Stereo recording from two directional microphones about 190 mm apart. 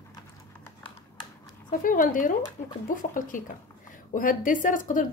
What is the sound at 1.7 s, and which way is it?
Speech, 45° left (ahead or behind).